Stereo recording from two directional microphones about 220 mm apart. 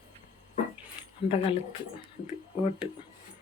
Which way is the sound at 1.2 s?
25° left (ahead or behind).